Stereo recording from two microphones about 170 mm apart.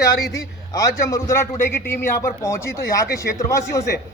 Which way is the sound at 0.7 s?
20° left (ahead or behind).